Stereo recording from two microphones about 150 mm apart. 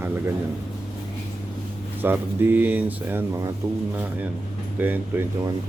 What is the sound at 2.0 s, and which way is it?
Speech, 15° right (ahead or behind).